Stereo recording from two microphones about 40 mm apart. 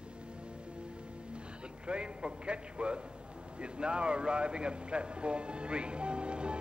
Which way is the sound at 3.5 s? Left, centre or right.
Right.